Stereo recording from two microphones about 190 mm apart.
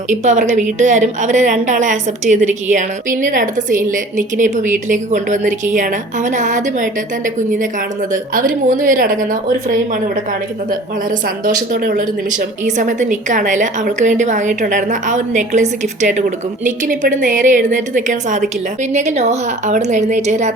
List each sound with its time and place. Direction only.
0.1 s a woman's voice: 40° right (ahead or behind)